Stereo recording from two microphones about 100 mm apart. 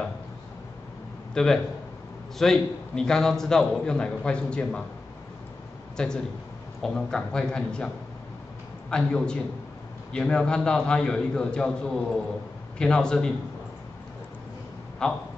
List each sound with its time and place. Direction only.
1.3 s a man's voice: 5° left (ahead or behind)
5.9 s a man's voice: 10° left (ahead or behind)
8.9 s a man's voice: 10° left (ahead or behind)
15.0 s a man's voice: 10° left (ahead or behind)